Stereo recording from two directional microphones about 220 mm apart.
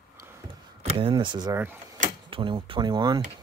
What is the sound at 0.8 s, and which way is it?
Speech, 25° right (ahead or behind).